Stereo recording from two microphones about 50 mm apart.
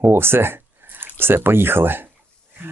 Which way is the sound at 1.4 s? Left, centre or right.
Right.